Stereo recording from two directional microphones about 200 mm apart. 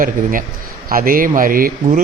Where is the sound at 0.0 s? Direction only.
45° right (ahead or behind).